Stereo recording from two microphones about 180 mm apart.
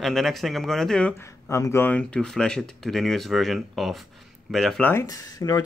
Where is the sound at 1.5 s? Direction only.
15° left (ahead or behind).